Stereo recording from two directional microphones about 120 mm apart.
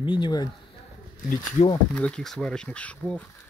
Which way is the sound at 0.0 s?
40° left (ahead or behind).